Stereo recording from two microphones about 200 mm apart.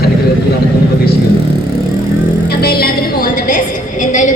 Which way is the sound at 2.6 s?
50° left (ahead or behind).